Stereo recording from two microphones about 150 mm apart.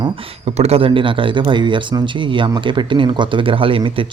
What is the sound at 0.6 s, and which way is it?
Speech, 40° right (ahead or behind).